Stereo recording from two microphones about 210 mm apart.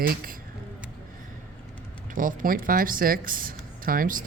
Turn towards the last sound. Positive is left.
turn(degrees=-40)  # may be behind; listen again after turning